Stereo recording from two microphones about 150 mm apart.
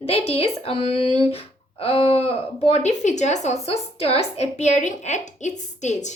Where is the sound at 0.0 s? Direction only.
40° left (ahead or behind).